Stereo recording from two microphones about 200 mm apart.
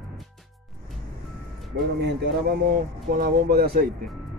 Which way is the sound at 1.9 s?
55° right (ahead or behind).